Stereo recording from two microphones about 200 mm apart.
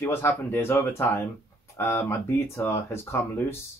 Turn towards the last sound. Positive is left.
turn(degrees=10)  # may be behind; listen again after turning